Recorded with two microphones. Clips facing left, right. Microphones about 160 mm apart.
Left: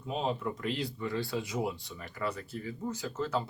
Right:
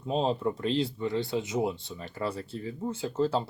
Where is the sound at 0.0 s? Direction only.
30° right (ahead or behind).